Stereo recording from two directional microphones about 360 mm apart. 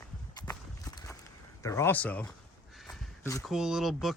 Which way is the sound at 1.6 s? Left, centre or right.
Centre.